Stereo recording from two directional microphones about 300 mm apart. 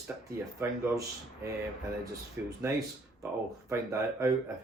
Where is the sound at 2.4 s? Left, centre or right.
Centre.